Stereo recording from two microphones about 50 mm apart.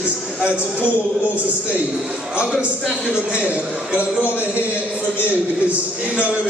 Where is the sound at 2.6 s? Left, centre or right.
Centre.